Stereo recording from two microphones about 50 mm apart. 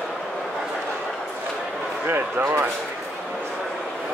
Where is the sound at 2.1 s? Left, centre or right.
Right.